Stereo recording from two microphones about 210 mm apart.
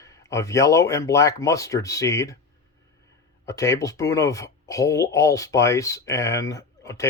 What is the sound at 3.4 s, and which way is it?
Speech, 15° left (ahead or behind).